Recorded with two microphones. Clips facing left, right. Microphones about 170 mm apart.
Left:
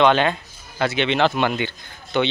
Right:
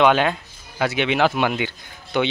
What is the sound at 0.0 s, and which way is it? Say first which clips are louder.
Speech: even; 5° right (ahead or behind).